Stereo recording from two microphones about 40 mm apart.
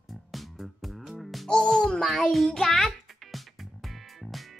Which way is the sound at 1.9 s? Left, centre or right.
Centre.